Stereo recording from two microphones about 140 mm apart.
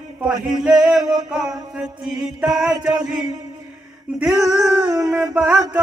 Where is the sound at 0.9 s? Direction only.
5° right (ahead or behind).